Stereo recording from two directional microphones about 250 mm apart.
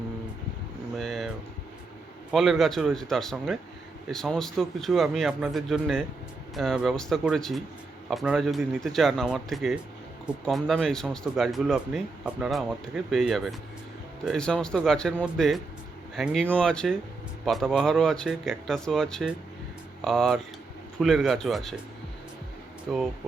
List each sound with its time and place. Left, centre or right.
0.9 s a sound: centre
2.3 s speech: centre
22.9 s speech: centre